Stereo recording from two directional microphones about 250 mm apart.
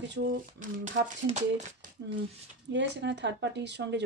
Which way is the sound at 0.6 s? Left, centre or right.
Right.